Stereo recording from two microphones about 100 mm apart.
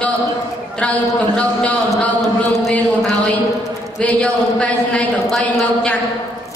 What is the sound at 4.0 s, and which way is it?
A woman's voice, 10° left (ahead or behind).